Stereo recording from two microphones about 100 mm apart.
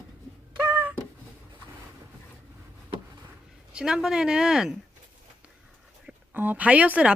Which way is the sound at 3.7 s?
5° right (ahead or behind).